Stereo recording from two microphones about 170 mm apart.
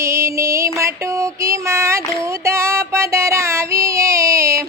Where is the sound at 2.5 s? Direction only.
15° right (ahead or behind).